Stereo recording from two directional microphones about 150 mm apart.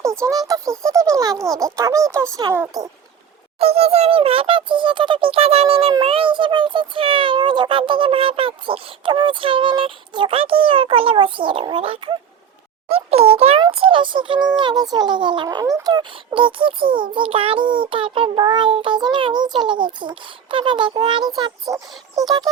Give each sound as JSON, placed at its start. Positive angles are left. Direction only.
{"t": 0.3, "sound": "speech", "side_deg": -25}
{"t": 3.6, "sound": "a child's voice", "side_deg": -40}